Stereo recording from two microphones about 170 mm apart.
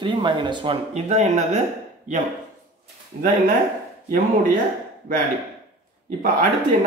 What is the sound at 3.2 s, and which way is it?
Speech, 50° right (ahead or behind).